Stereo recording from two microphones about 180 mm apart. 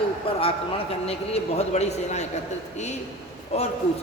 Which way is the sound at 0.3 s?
30° left (ahead or behind).